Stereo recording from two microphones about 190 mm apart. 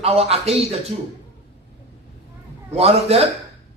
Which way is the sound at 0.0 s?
30° right (ahead or behind).